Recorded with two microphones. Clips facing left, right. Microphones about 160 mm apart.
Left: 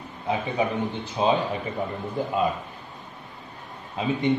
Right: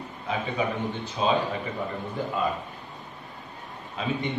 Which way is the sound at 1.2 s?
20° left (ahead or behind).